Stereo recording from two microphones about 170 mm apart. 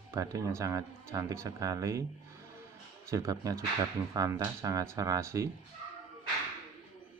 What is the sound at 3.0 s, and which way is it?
Speech, 20° right (ahead or behind).